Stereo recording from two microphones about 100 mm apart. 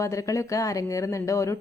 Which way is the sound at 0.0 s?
30° left (ahead or behind).